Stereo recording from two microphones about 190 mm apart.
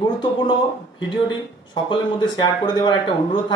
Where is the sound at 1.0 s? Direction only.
25° left (ahead or behind).